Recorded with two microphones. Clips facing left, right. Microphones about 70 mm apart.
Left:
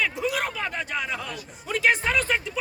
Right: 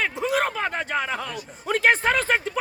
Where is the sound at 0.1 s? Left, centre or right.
Right.